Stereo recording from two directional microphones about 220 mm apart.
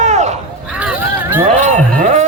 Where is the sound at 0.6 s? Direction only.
5° right (ahead or behind).